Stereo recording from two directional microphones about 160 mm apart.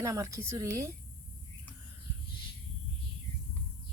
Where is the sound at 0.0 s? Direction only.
20° right (ahead or behind).